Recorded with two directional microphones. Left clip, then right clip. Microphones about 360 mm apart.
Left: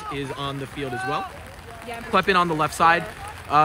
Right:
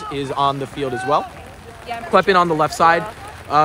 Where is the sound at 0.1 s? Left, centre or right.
Centre.